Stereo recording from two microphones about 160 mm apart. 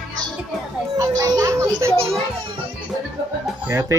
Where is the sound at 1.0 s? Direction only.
20° right (ahead or behind).